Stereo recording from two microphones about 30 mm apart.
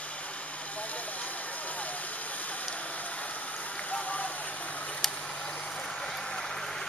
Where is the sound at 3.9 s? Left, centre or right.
Left.